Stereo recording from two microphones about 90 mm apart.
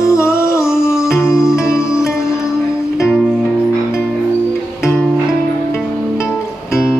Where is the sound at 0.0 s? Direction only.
35° left (ahead or behind).